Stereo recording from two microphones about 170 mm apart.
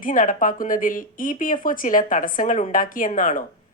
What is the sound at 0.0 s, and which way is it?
Speech, 50° left (ahead or behind).